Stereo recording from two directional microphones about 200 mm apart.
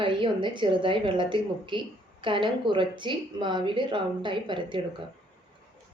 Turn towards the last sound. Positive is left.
turn(degrees=-25)  # may be behind; listen again after turning